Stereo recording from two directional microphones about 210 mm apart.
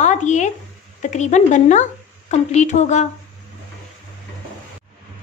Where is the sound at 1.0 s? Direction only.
35° left (ahead or behind).